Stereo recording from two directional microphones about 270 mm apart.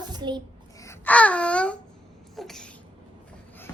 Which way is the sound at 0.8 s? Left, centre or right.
Centre.